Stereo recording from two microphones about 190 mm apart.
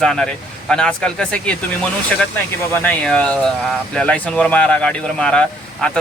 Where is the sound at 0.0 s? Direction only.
5° left (ahead or behind).